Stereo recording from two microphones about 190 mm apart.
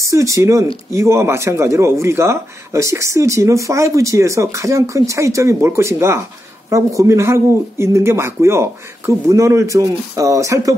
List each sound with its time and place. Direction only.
0.0 s speech: 15° right (ahead or behind)